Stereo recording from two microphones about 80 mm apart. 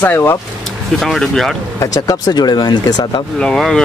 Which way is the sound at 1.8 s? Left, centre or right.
Left.